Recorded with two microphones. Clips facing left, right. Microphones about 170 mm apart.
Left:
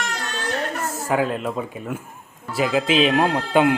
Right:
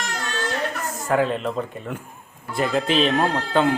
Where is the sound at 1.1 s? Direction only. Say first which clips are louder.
Right 1 dB; 5° left (ahead or behind).